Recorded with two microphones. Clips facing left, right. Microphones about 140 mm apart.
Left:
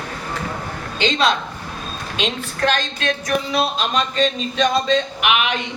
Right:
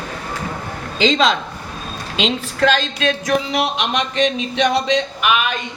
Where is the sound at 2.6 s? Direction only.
90° right.